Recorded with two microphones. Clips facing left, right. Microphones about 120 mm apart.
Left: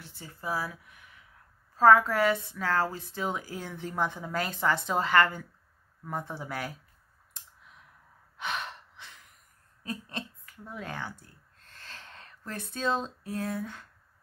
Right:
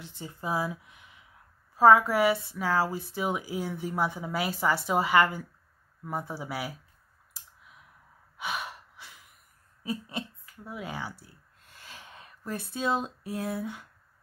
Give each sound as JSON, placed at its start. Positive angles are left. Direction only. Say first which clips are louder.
{"t": 0.0, "sound": "speech", "louder": "right 2 dB", "side_deg": -20}
{"t": 7.3, "sound": "clicking", "louder": "even", "side_deg": -5}
{"t": 8.4, "sound": "gasp", "louder": "even", "side_deg": -10}
{"t": 9.8, "sound": "speech", "louder": "right 3 dB", "side_deg": -10}